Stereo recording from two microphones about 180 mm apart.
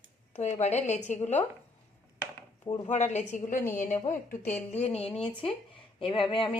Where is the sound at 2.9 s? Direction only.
40° left (ahead or behind).